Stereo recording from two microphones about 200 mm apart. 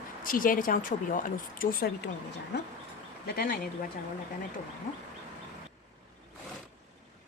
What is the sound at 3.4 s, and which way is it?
Speech, 45° left (ahead or behind).